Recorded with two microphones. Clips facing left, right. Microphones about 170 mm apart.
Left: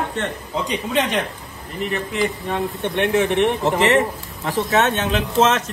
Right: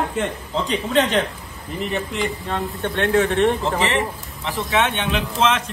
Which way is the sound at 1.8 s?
Centre (ahead or behind).